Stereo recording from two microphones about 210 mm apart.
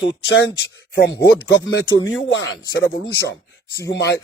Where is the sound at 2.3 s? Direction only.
60° left (ahead or behind).